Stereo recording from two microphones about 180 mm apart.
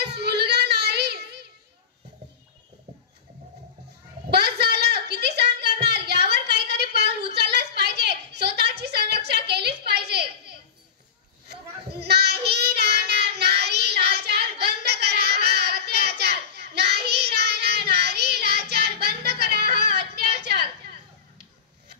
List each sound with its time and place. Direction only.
0.0 s child singing: 65° right (ahead or behind)
4.3 s a sound: 65° right (ahead or behind)
12.0 s child singing: 65° right (ahead or behind)